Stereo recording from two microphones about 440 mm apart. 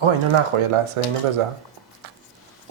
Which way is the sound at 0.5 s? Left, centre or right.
Right.